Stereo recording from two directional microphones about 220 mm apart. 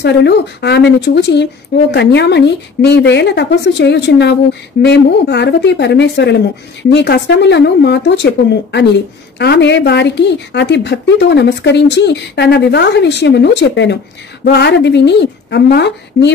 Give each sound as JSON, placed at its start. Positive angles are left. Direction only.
{"t": 0.0, "sound": "speech", "side_deg": 50}
{"t": 9.4, "sound": "speech", "side_deg": 50}